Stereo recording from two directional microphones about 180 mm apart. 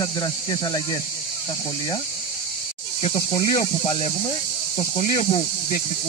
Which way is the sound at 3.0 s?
25° left (ahead or behind).